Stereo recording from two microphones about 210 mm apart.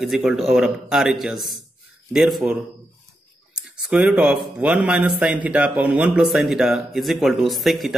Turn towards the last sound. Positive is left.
turn(degrees=0)  # may be behind; listen again after turning